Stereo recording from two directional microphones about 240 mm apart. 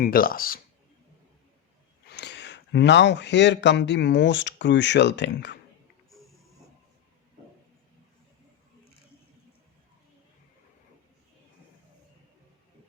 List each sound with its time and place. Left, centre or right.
0.0 s speech: left
2.0 s speech: left